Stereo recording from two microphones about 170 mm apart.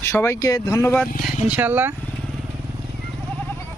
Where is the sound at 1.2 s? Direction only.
10° right (ahead or behind).